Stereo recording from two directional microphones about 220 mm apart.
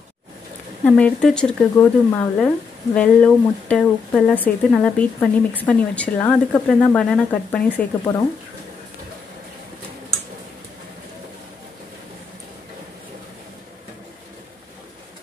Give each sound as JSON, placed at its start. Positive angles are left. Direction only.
{"t": 0.8, "sound": "speech", "side_deg": 5}